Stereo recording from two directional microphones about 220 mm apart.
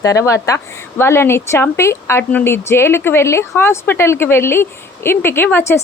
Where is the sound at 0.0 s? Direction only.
15° left (ahead or behind).